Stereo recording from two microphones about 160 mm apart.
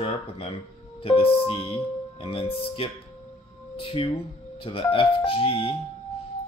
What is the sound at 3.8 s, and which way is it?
Speech, 35° left (ahead or behind).